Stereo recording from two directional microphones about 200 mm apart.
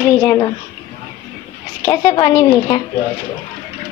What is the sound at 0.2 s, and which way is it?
Speech, 15° left (ahead or behind).